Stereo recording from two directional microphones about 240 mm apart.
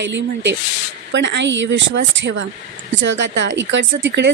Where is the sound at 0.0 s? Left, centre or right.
Right.